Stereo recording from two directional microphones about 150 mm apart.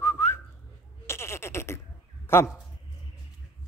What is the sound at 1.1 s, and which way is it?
Bleat, 15° left (ahead or behind).